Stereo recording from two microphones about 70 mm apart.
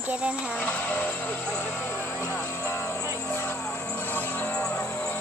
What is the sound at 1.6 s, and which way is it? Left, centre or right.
Music, left.